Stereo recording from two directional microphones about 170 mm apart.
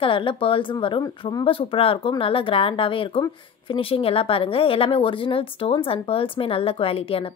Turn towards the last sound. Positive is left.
turn(degrees=35)  # may be behind; listen again after turning